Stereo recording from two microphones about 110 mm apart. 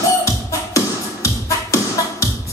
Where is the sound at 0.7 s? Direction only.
30° left (ahead or behind).